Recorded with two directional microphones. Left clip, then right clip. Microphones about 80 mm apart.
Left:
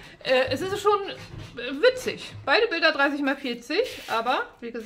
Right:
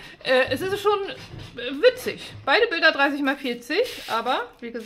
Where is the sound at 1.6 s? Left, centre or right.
Centre.